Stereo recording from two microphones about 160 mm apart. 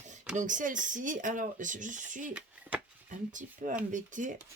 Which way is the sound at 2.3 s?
5° right (ahead or behind).